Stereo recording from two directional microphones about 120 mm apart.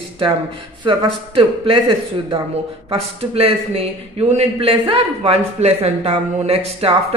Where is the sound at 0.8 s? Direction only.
45° right (ahead or behind).